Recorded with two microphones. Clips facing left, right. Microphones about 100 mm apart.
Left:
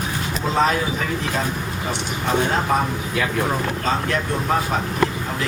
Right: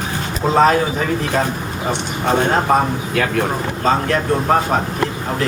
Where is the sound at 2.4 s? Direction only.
40° right (ahead or behind).